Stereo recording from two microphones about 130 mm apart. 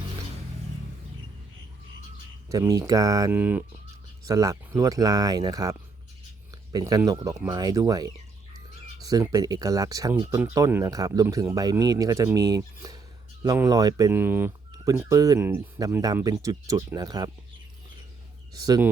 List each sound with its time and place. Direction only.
2.5 s speech: 25° right (ahead or behind)
3.3 s speech: 15° right (ahead or behind)
4.2 s speech: 25° right (ahead or behind)
14.7 s speech: 25° right (ahead or behind)
18.5 s speech: 30° right (ahead or behind)